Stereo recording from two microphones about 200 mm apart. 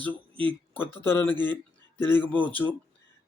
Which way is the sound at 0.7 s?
10° left (ahead or behind).